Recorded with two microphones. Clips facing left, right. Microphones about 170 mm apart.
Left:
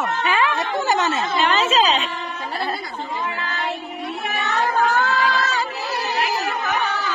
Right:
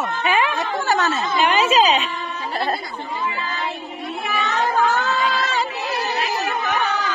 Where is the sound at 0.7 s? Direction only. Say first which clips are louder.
Even; 20° left (ahead or behind).